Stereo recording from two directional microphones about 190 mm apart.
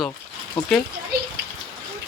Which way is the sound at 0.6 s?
25° left (ahead or behind).